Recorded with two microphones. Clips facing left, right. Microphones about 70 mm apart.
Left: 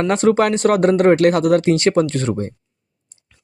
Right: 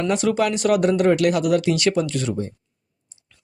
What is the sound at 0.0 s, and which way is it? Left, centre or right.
Speech, left.